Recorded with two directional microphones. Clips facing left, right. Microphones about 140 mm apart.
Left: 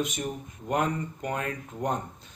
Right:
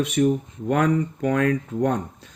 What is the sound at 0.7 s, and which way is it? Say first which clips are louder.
Speech: right 7 dB; 90° right.